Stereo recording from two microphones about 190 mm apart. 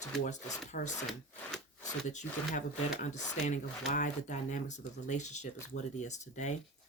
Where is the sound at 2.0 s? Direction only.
40° left (ahead or behind).